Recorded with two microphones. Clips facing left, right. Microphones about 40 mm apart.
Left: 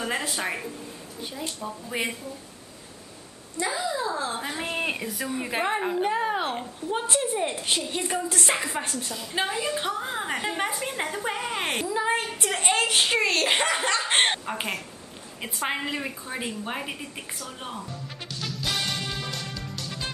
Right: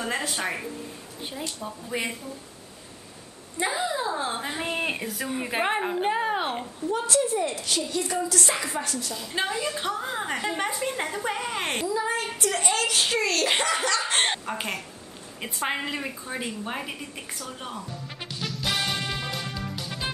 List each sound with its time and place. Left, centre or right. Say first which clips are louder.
0.3 s a woman's voice: even; centre
1.9 s a woman's voice: even; centre
3.5 s speech: right 1 dB; right
4.6 s a woman's voice: even; centre
6.9 s a woman's voice: right 2 dB; left
9.1 s a woman's voice: left 1 dB; centre
11.9 s a woman's voice: left 1 dB; left
14.4 s a woman's voice: even; centre
18.3 s music: right 1 dB; centre